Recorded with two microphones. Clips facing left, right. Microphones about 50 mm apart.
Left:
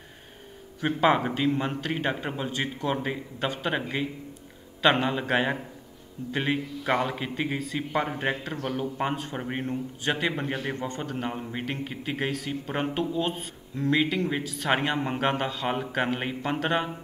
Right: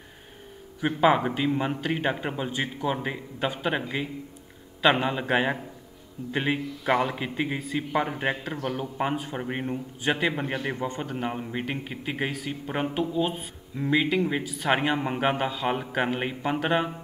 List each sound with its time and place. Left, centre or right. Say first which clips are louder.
0.8 s a man's voice: right 1 dB; centre
7.5 s a man's voice: right 1 dB; centre
7.9 s a man's voice: right 1 dB; centre
9.7 s a man's voice: right 2 dB; centre